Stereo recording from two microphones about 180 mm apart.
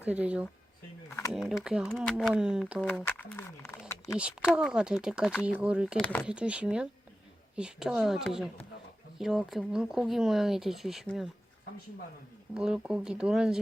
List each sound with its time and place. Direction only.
0.0 s speech: 10° right (ahead or behind)
1.0 s a sound: 15° left (ahead or behind)
1.3 s speech: centre (ahead or behind)
4.2 s speech: 5° right (ahead or behind)
6.0 s speech: 10° left (ahead or behind)
6.2 s speech: 5° right (ahead or behind)
12.5 s speech: 5° right (ahead or behind)